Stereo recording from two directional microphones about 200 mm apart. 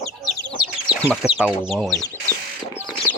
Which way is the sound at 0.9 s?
5° right (ahead or behind).